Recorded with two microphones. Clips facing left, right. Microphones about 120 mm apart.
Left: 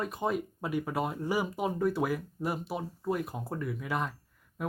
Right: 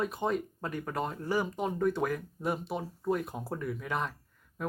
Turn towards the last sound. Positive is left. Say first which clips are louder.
# even
turn(degrees=5)  # may be behind; listen again after turning